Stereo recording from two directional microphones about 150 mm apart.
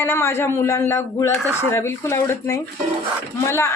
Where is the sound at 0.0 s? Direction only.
15° left (ahead or behind).